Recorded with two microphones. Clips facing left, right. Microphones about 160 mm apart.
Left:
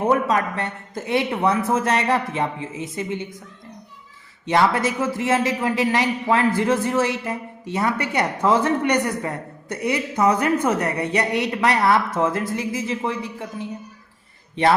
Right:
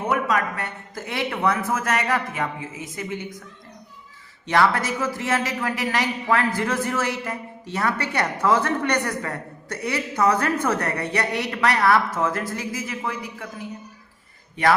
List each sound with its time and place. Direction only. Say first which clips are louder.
0.1 s a woman's voice: even; 30° left (ahead or behind)
4.4 s a woman's voice: left 2 dB; 20° left (ahead or behind)